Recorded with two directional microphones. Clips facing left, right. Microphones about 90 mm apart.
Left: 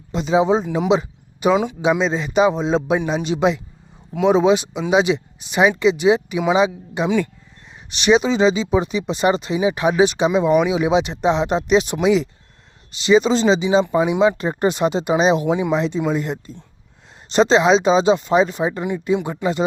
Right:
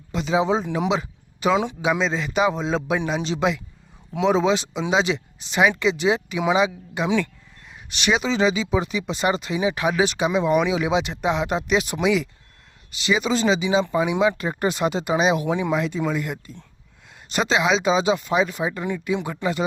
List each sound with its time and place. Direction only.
0.1 s speech: 20° left (ahead or behind)
0.9 s a sound: 20° left (ahead or behind)
1.8 s speech: 20° left (ahead or behind)